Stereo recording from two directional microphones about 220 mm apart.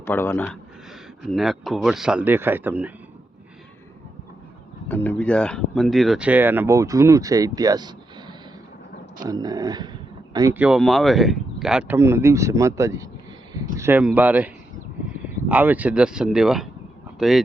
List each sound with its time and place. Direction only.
0.0 s speech: 10° left (ahead or behind); by 2.9 s 5° right (ahead or behind)
4.9 s speech: 10° left (ahead or behind); by 10.6 s 15° right (ahead or behind)
10.6 s speech: 5° right (ahead or behind)